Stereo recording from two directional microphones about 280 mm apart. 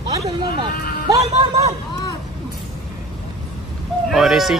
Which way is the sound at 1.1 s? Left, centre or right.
Centre.